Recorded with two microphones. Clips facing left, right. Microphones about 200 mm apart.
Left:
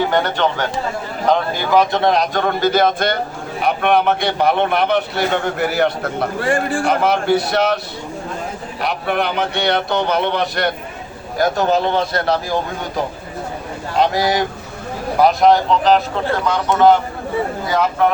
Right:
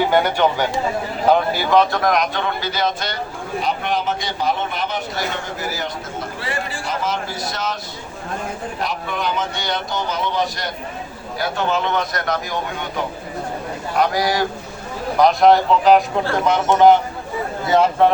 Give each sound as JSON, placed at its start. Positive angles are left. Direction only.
{"t": 0.0, "sound": "speech", "side_deg": -10}
{"t": 1.9, "sound": "a man's voice", "side_deg": 30}
{"t": 2.3, "sound": "a man's voice", "side_deg": 50}
{"t": 8.8, "sound": "a man's voice", "side_deg": 65}
{"t": 11.3, "sound": "a man's voice", "side_deg": 40}
{"t": 15.2, "sound": "speech", "side_deg": 0}
{"t": 16.4, "sound": "speech", "side_deg": -20}